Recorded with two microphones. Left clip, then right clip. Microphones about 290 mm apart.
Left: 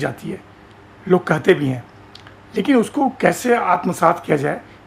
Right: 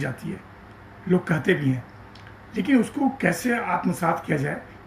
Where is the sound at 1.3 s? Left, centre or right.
Centre.